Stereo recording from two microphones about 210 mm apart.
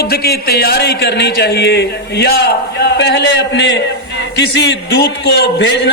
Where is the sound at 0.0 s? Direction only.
50° left (ahead or behind).